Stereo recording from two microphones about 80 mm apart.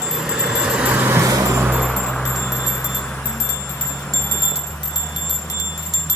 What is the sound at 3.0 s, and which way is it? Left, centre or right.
Wind chime, centre.